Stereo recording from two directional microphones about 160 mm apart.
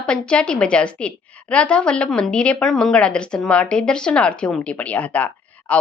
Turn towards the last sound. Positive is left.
turn(degrees=10)  # may be behind; listen again after turning